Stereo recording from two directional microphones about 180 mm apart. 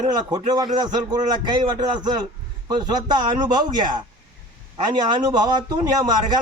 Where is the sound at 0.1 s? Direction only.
25° right (ahead or behind).